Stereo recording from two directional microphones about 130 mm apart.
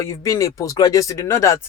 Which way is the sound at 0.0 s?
25° left (ahead or behind).